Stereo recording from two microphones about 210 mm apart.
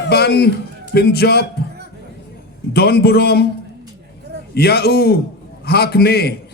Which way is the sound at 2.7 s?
50° left (ahead or behind).